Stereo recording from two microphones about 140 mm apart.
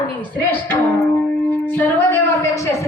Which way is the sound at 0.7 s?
15° left (ahead or behind).